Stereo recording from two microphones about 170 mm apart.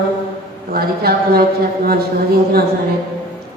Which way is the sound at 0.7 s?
65° right (ahead or behind).